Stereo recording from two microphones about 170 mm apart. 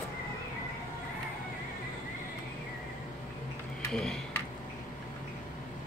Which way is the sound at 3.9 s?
5° left (ahead or behind).